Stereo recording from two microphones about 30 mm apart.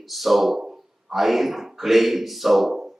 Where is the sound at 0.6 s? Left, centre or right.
Right.